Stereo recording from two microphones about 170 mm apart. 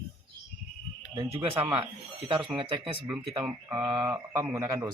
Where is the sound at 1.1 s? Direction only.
30° right (ahead or behind).